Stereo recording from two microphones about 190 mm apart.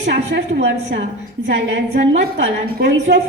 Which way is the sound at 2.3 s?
75° right (ahead or behind).